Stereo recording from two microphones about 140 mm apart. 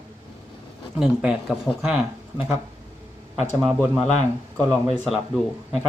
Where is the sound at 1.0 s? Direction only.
5° right (ahead or behind).